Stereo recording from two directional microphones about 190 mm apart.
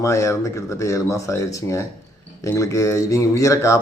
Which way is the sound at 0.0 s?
15° left (ahead or behind).